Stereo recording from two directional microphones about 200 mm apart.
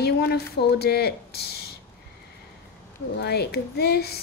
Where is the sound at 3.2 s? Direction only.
55° left (ahead or behind).